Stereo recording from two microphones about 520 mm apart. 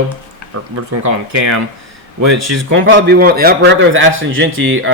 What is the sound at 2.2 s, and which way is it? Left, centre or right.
A man's voice, right.